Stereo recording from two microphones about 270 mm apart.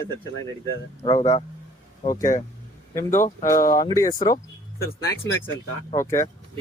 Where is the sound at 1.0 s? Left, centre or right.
Centre.